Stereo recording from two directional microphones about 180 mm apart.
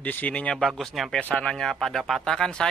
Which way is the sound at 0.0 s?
10° left (ahead or behind).